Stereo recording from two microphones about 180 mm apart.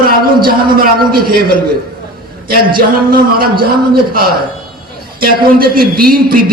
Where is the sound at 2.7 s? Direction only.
55° right (ahead or behind).